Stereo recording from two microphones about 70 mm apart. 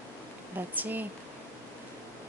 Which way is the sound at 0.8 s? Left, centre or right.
Right.